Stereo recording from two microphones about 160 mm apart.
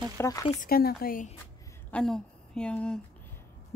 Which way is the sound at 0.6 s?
70° left (ahead or behind).